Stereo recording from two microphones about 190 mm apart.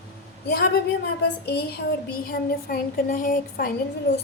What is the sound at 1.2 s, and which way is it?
Child singing, 55° left (ahead or behind).